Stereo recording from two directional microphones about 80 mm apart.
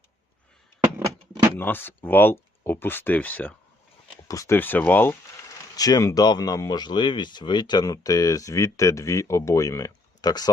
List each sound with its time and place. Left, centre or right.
1.5 s speech: left
4.3 s speech: left
4.5 s speech: left
5.5 s a sound: left
6.2 s speech: left